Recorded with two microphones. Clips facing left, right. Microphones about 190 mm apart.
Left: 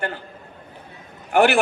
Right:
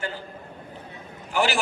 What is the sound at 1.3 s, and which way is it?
Speech, 60° left (ahead or behind).